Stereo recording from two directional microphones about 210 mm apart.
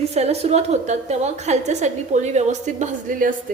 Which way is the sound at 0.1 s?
30° right (ahead or behind).